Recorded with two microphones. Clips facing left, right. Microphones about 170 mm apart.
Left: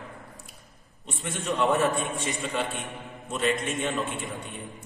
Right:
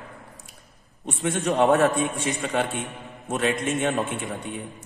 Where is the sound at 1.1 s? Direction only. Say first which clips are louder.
Right 6 dB; 70° right (ahead or behind).